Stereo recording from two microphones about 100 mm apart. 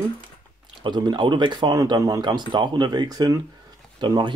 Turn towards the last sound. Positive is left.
turn(degrees=-50)  # may be behind; listen again after turning